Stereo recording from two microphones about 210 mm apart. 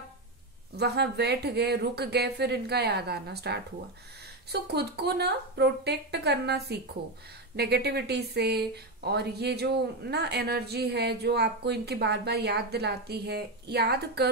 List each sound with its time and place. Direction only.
0.7 s speech: 50° right (ahead or behind)